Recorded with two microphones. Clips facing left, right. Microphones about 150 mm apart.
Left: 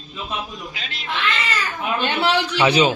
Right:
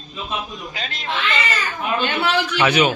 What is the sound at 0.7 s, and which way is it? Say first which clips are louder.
Speech: right 4 dB; 40° right (ahead or behind).